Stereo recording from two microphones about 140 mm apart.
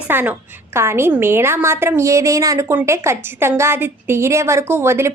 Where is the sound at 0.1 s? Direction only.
15° right (ahead or behind).